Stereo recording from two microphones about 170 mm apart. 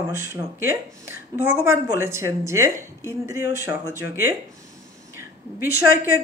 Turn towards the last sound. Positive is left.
turn(degrees=-10)  # may be behind; listen again after turning